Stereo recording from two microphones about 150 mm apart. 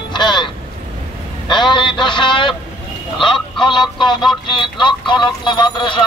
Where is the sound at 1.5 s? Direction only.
30° left (ahead or behind).